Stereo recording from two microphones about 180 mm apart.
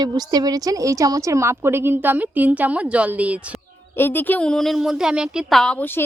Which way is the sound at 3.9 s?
10° left (ahead or behind).